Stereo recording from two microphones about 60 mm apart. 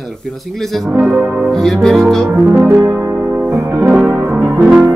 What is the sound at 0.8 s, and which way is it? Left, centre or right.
Speech, right.